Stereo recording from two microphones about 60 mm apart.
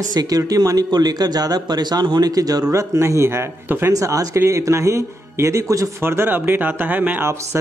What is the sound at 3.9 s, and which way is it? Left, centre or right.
Speech, right.